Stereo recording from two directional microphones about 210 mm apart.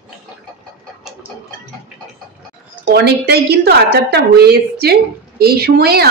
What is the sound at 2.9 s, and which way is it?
A woman's voice, 50° right (ahead or behind).